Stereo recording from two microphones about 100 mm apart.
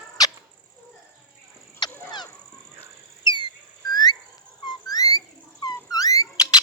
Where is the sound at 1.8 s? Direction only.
45° left (ahead or behind).